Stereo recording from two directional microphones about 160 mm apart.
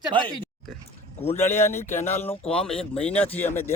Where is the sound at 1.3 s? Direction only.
15° left (ahead or behind).